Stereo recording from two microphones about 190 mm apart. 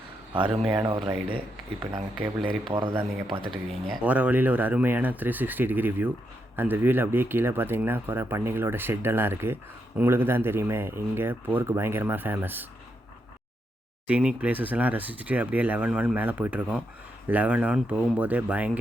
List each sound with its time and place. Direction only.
0.3 s speech: 25° right (ahead or behind)
3.7 s speech: 5° right (ahead or behind)
14.1 s speech: 5° right (ahead or behind)